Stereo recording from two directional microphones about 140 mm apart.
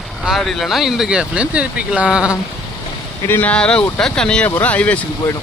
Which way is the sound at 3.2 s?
15° left (ahead or behind).